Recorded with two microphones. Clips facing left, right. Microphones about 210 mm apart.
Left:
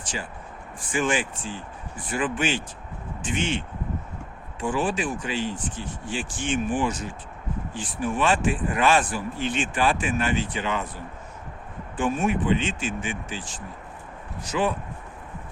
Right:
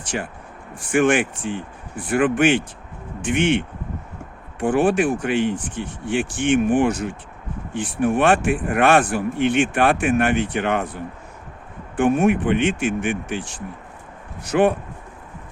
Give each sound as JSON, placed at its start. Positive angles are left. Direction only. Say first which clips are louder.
{"t": 0.0, "sound": "speech", "louder": "right 6 dB", "side_deg": -60}